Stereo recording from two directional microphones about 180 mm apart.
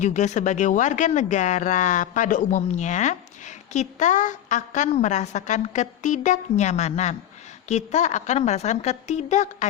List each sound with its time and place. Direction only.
0.0 s speech: 40° left (ahead or behind)